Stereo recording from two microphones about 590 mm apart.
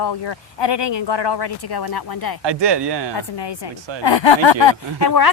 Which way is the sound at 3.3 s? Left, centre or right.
Left.